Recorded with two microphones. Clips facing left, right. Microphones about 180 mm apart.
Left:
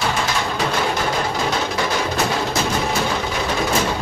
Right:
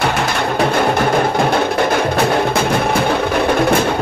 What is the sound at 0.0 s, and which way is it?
Music, 60° right (ahead or behind).